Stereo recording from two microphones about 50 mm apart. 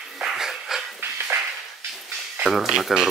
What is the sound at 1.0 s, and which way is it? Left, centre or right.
Dog, right.